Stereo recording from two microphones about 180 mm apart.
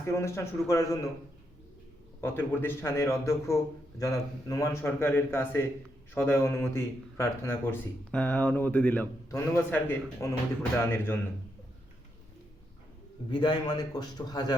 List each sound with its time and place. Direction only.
0.0 s speech: 15° left (ahead or behind)
2.2 s speech: 10° left (ahead or behind)
13.3 s a man's voice: 25° left (ahead or behind)